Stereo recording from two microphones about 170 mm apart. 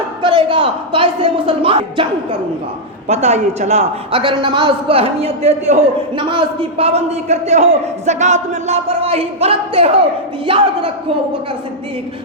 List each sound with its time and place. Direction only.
0.2 s a man's voice: 30° right (ahead or behind)